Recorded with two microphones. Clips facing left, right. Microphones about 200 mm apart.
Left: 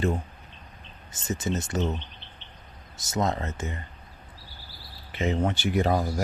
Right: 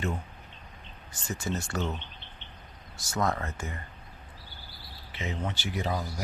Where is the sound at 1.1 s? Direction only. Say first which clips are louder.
Left 4 dB; 20° left (ahead or behind).